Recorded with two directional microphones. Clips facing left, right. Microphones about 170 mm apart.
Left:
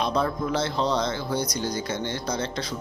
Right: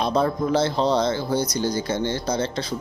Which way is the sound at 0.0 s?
35° right (ahead or behind).